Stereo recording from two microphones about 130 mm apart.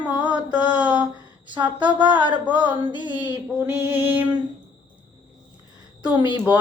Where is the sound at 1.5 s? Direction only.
35° right (ahead or behind).